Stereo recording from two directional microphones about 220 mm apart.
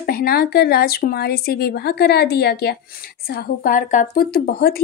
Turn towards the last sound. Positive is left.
turn(degrees=45)  # may be behind; listen again after turning